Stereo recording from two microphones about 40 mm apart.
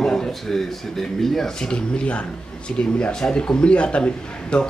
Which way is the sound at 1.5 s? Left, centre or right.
Left.